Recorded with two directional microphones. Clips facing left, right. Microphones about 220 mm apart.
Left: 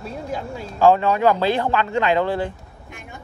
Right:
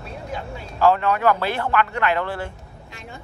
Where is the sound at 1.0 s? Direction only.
20° left (ahead or behind).